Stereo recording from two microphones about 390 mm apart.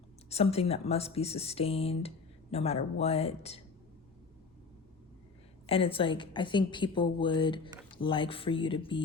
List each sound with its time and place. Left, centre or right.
0.3 s speech: centre
5.6 s speech: centre